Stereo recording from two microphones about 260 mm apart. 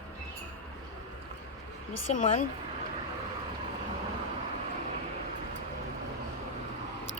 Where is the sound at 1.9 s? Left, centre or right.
Left.